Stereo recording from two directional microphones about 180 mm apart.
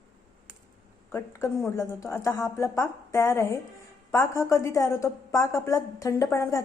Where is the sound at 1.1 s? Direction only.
15° left (ahead or behind).